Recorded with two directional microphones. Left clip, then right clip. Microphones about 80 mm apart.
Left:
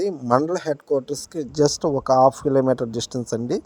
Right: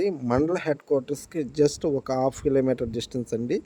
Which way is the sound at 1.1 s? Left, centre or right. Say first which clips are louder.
Left 2 dB; right.